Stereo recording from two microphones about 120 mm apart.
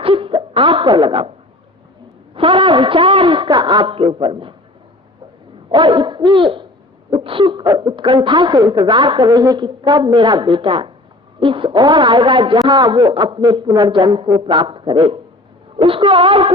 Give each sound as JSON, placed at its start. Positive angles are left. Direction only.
{"t": 0.0, "sound": "a sound", "side_deg": -50}
{"t": 1.0, "sound": "a man's voice", "side_deg": -50}
{"t": 2.3, "sound": "a man's voice", "side_deg": -45}
{"t": 5.7, "sound": "a woman's voice", "side_deg": -40}
{"t": 7.1, "sound": "owl", "side_deg": -45}
{"t": 7.8, "sound": "a woman's voice", "side_deg": -40}
{"t": 9.2, "sound": "a woman's voice", "side_deg": -30}
{"t": 14.1, "sound": "a man's voice", "side_deg": -45}